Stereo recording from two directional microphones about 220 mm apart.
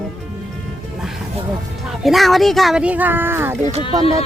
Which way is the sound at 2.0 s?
Centre (ahead or behind).